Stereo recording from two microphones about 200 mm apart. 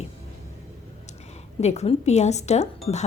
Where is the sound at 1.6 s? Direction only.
35° left (ahead or behind).